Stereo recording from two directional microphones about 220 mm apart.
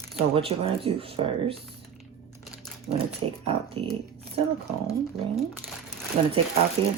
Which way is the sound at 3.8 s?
25° right (ahead or behind).